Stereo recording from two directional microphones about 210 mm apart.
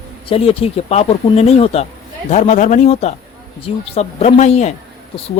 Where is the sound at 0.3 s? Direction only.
25° left (ahead or behind).